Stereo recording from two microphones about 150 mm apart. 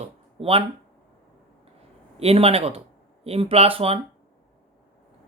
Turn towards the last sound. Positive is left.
turn(degrees=-40)  # may be behind; listen again after turning